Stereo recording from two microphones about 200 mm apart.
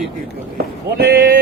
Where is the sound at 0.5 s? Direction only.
50° right (ahead or behind).